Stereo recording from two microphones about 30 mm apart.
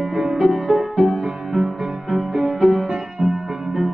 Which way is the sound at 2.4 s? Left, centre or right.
Centre.